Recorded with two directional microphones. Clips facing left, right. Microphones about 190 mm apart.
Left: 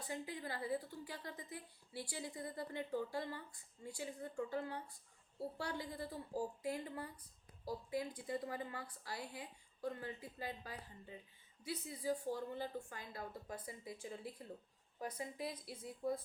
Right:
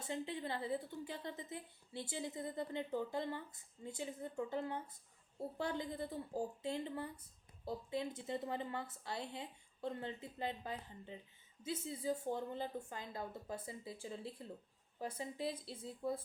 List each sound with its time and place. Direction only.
0.0 s a woman's voice: 25° right (ahead or behind)